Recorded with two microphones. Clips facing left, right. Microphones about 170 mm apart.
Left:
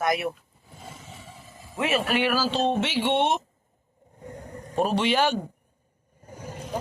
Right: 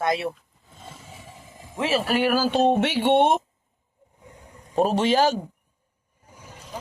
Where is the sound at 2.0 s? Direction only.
40° right (ahead or behind).